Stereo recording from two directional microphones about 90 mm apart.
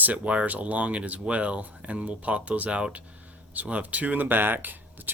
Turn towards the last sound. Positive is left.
turn(degrees=-20)  # may be behind; listen again after turning